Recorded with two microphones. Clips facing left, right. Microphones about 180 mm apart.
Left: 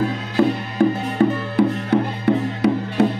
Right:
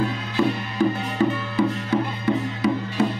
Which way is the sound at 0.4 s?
55° left (ahead or behind).